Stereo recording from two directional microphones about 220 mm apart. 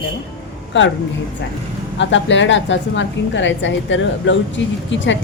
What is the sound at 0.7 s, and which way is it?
Speech, 55° left (ahead or behind).